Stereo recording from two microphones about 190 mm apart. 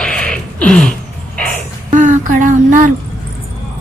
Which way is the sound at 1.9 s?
40° right (ahead or behind).